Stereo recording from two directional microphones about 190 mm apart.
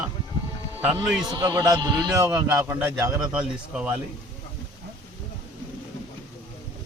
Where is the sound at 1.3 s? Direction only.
15° right (ahead or behind).